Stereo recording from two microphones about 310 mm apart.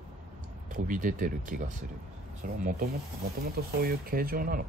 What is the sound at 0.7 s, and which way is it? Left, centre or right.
Speech, right.